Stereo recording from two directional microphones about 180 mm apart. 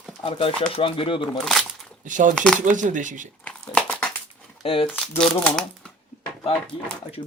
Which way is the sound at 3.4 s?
10° left (ahead or behind).